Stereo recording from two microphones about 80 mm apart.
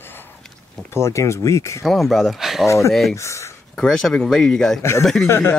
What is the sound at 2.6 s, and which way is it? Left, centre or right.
Speech, left.